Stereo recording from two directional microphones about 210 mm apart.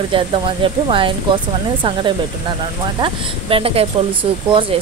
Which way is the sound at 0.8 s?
25° right (ahead or behind).